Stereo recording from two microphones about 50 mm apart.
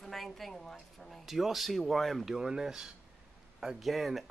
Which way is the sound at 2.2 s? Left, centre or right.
Centre.